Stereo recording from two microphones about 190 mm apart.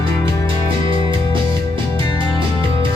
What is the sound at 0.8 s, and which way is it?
Music, 25° right (ahead or behind).